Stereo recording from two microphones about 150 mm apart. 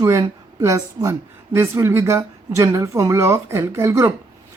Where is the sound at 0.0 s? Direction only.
20° right (ahead or behind).